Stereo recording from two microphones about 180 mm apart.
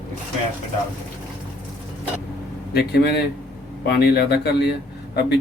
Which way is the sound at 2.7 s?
65° left (ahead or behind).